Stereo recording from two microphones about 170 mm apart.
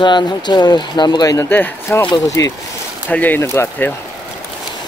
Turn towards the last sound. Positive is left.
turn(degrees=15)  # may be behind; listen again after turning